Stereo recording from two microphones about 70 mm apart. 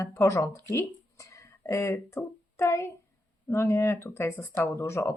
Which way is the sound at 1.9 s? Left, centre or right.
Left.